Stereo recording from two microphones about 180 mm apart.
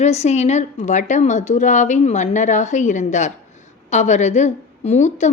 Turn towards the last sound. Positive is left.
turn(degrees=40)  # may be behind; listen again after turning